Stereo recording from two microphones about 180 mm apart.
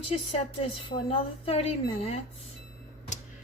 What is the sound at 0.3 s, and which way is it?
A woman's voice, 30° left (ahead or behind).